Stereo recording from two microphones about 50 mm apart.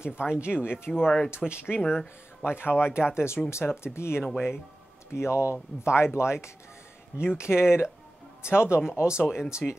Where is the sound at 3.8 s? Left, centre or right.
Left.